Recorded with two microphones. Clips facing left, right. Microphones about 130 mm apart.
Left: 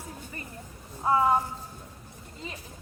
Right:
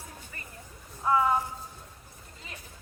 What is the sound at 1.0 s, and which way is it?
Speech, 25° left (ahead or behind).